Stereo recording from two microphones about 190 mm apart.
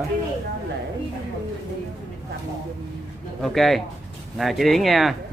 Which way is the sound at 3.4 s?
Centre (ahead or behind).